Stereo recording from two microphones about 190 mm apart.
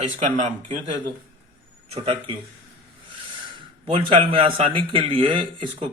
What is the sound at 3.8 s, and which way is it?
A man's voice, 25° right (ahead or behind).